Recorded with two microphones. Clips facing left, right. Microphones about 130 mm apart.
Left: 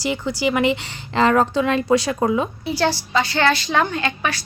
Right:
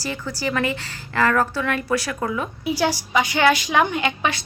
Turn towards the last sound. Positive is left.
turn(degrees=-15)  # may be behind; listen again after turning